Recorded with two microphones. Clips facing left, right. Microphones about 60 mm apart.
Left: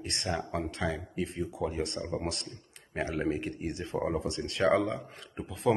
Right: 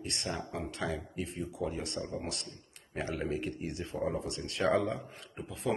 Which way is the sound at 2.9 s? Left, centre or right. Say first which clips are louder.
Left 4 dB; left.